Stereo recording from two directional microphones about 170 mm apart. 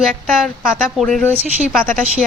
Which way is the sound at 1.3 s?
10° right (ahead or behind).